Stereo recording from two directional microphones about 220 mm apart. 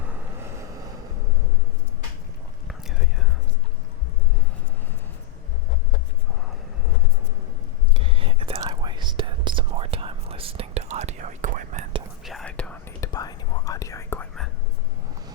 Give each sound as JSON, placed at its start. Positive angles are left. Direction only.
{"t": 2.6, "sound": "whispering", "side_deg": 0}
{"t": 7.9, "sound": "whispering", "side_deg": -25}
{"t": 12.2, "sound": "whispering", "side_deg": 0}